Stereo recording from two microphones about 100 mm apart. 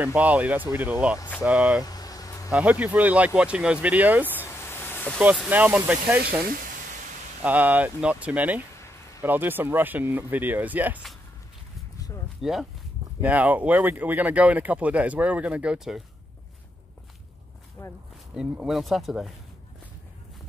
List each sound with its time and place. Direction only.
0.0 s speech: 15° right (ahead or behind)
1.8 s vehicle: 40° left (ahead or behind)
2.5 s speech: 15° right (ahead or behind)
4.3 s a sound: 20° left (ahead or behind)
5.5 s speech: 15° right (ahead or behind)
7.4 s speech: 15° right (ahead or behind)
12.4 s speech: centre (ahead or behind)
13.2 s speech: 15° right (ahead or behind)
17.8 s speech: 25° left (ahead or behind)
18.3 s speech: 5° right (ahead or behind)